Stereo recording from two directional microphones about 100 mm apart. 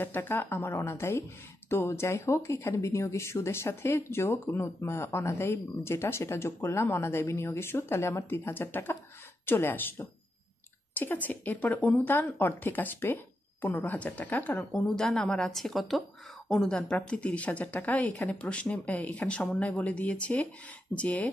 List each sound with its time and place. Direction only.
0.0 s speech: 20° left (ahead or behind)
14.7 s a woman's voice: 5° left (ahead or behind)